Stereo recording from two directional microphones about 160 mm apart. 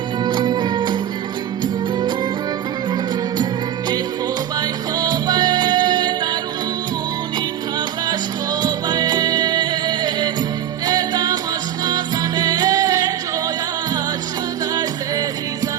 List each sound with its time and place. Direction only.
0.3 s music: 25° right (ahead or behind)
4.6 s music: 25° right (ahead or behind)
8.6 s music: 25° right (ahead or behind)